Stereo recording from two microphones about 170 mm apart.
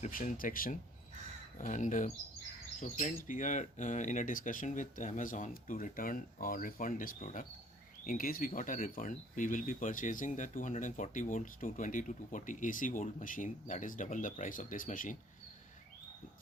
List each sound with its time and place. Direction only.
0.0 s speech: 50° left (ahead or behind)
3.2 s speech: 50° left (ahead or behind)